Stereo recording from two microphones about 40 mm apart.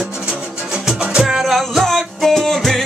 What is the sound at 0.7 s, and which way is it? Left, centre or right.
Music, centre.